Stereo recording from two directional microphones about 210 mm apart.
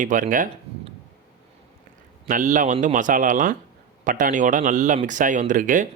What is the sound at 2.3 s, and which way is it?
Speech, 40° right (ahead or behind).